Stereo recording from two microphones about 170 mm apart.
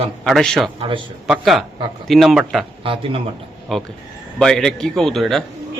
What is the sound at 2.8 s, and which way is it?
Speech, 30° right (ahead or behind).